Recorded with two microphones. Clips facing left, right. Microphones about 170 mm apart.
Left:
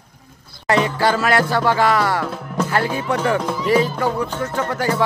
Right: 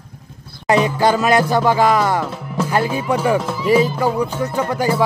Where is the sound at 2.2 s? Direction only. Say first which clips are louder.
Even; 5° right (ahead or behind).